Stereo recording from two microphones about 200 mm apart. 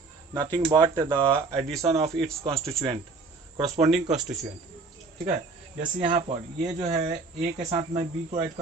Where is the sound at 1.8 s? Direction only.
30° right (ahead or behind).